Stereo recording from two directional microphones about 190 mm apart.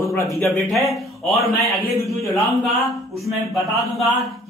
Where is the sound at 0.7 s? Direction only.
Centre (ahead or behind).